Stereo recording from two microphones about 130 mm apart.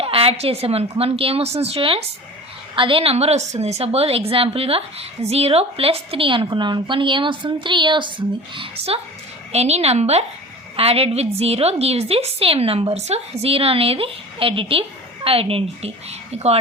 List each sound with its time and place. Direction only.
0.0 s a woman's voice: 45° right (ahead or behind)